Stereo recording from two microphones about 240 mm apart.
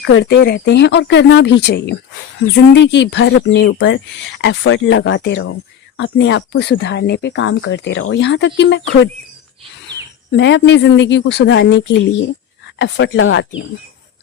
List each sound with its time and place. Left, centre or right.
0.0 s speech: left
10.3 s speech: left